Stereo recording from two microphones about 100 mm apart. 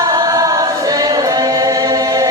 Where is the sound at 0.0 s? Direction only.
35° right (ahead or behind).